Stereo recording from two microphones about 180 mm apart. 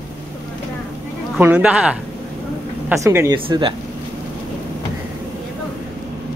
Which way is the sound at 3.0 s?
15° right (ahead or behind).